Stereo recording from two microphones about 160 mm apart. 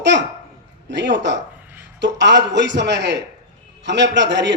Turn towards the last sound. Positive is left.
turn(degrees=-90)